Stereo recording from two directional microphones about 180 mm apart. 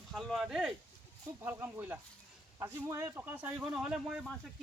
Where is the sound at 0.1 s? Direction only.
Centre (ahead or behind).